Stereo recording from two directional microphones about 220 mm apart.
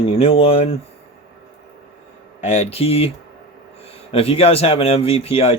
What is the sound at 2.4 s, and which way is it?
Speech, 30° left (ahead or behind).